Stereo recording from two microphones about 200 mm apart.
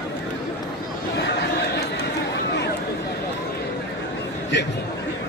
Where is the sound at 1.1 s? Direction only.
60° left (ahead or behind).